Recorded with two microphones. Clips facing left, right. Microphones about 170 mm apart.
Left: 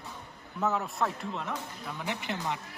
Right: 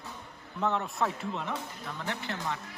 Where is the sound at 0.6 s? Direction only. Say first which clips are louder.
Even; centre (ahead or behind).